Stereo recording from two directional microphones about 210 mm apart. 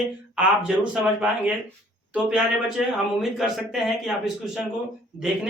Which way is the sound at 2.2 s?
Centre (ahead or behind).